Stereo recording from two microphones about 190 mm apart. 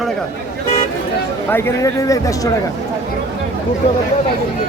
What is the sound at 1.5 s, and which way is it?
Speech, 10° left (ahead or behind).